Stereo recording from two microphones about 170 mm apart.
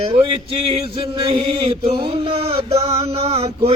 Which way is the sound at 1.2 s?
35° right (ahead or behind).